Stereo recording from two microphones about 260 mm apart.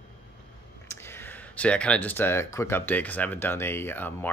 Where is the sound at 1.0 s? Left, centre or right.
Centre.